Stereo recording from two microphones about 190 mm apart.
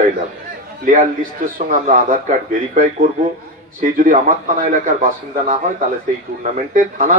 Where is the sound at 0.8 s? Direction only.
45° right (ahead or behind).